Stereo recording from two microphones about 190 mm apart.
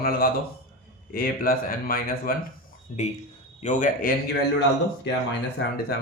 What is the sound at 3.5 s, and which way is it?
Speech, 40° left (ahead or behind).